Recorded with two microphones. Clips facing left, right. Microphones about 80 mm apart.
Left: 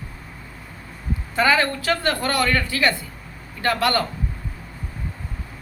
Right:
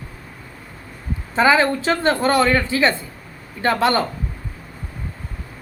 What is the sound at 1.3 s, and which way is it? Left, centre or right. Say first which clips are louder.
Speech: right 4 dB; centre.